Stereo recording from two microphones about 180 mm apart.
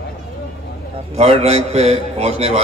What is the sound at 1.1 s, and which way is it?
A man's voice, 35° right (ahead or behind).